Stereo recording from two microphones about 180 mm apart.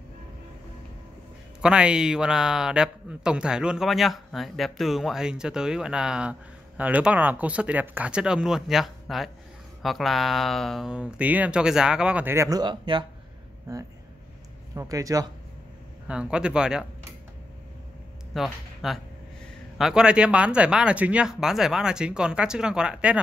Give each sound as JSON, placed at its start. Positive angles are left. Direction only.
{"t": 1.6, "sound": "a man's voice", "side_deg": -5}
{"t": 16.1, "sound": "a man's voice", "side_deg": -5}
{"t": 18.3, "sound": "a man's voice", "side_deg": 0}